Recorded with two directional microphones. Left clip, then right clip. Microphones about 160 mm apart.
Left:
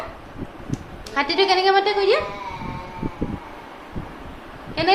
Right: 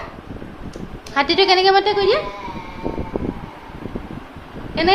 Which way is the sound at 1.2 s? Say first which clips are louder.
Right 4 dB; 45° right (ahead or behind).